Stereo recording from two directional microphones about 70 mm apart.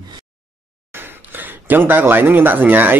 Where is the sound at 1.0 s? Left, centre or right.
Right.